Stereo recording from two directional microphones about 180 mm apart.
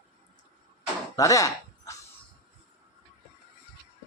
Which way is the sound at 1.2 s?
20° left (ahead or behind).